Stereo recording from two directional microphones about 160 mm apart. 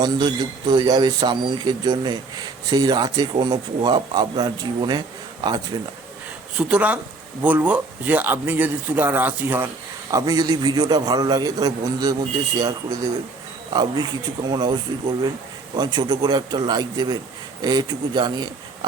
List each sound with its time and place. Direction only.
0.0 s speech: 25° right (ahead or behind)
6.6 s speech: 5° right (ahead or behind); by 18.9 s 25° right (ahead or behind)